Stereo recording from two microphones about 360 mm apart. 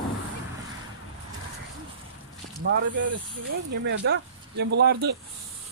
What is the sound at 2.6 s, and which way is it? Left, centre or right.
Speech, right.